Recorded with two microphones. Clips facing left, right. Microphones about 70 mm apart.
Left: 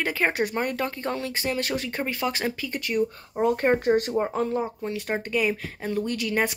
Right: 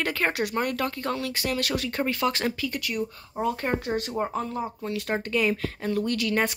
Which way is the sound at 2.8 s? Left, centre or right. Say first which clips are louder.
Left 5 dB; left.